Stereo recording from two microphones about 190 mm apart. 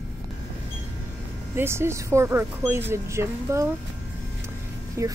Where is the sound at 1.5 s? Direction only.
15° right (ahead or behind).